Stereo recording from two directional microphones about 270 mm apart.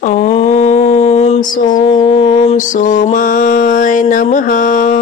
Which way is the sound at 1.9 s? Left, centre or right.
Centre.